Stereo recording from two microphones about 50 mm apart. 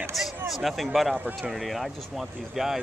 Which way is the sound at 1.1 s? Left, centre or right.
Right.